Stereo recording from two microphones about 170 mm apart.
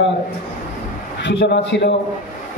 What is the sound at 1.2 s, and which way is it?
Speech, 90° left.